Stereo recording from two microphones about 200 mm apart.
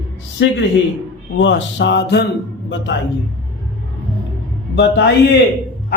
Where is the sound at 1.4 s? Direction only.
60° left (ahead or behind).